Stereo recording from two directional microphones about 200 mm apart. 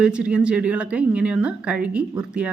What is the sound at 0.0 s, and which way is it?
A woman's voice, 5° right (ahead or behind).